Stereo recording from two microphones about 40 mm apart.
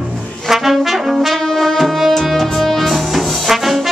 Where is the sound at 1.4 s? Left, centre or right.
Centre.